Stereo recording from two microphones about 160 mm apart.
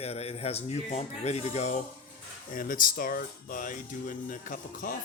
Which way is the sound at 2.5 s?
60° left (ahead or behind).